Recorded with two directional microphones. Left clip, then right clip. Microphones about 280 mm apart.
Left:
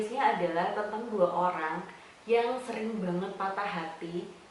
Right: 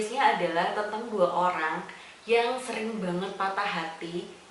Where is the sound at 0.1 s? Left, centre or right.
Centre.